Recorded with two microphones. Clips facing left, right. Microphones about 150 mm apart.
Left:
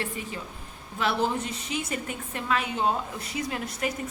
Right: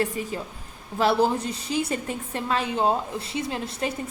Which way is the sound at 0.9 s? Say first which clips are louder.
Right 5 dB; 35° right (ahead or behind).